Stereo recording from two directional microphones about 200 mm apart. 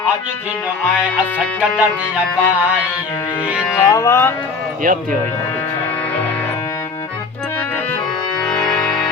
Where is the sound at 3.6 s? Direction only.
10° left (ahead or behind).